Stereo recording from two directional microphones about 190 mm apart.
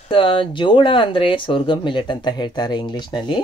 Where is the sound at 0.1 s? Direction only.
25° left (ahead or behind).